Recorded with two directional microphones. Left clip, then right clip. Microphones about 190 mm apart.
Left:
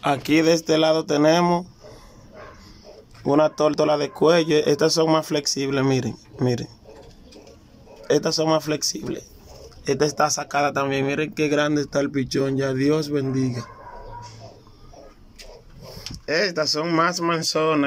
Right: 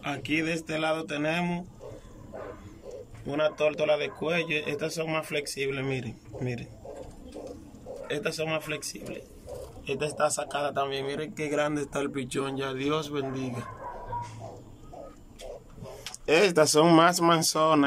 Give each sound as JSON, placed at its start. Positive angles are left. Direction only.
{"t": 0.0, "sound": "speech", "side_deg": 25}
{"t": 3.3, "sound": "a man's voice", "side_deg": 35}
{"t": 8.1, "sound": "a man's voice", "side_deg": 35}
{"t": 11.4, "sound": "a man's voice", "side_deg": 45}
{"t": 16.3, "sound": "speech", "side_deg": -5}